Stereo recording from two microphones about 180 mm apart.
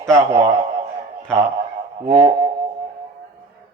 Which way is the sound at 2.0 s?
35° right (ahead or behind).